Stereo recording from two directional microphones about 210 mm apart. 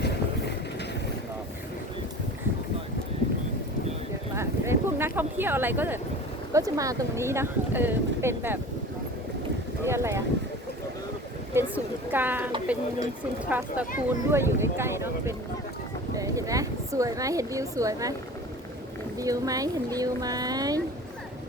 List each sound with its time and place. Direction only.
4.4 s a sound: 10° right (ahead or behind)
6.5 s speech: 15° right (ahead or behind)
9.8 s speech: 15° right (ahead or behind)
11.5 s speech: 10° right (ahead or behind)
19.2 s speech: 15° right (ahead or behind)